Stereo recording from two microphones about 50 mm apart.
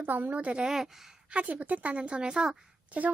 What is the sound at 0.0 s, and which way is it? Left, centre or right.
Speech, right.